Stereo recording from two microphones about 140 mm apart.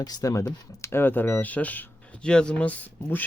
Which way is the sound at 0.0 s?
25° left (ahead or behind).